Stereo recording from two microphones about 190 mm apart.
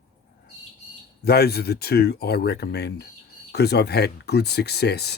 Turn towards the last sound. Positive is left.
turn(degrees=60)  # may be behind; listen again after turning